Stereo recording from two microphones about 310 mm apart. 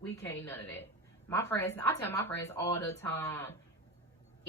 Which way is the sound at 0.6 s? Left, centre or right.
Centre.